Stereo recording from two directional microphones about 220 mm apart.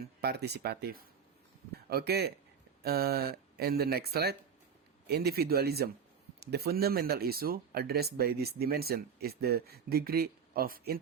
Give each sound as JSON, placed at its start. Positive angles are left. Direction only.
{"t": 0.2, "sound": "speech", "side_deg": -50}